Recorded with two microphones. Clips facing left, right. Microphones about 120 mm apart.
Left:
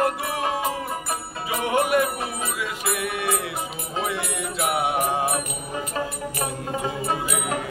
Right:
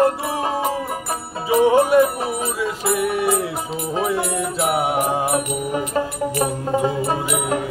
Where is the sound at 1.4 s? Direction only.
30° right (ahead or behind).